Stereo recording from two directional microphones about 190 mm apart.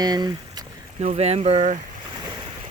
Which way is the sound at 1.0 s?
35° right (ahead or behind).